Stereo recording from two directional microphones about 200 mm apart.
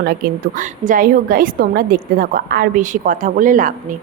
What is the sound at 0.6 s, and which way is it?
A woman's voice, 40° right (ahead or behind).